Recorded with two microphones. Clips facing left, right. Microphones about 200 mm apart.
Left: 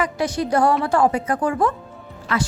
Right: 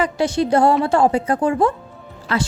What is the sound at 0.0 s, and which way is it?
A woman's voice, 30° right (ahead or behind).